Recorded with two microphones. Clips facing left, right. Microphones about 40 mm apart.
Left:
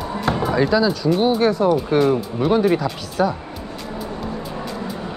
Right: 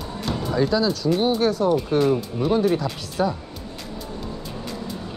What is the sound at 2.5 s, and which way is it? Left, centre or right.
Speech, left.